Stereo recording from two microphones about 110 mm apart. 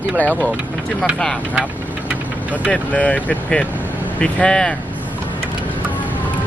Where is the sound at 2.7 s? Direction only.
10° left (ahead or behind).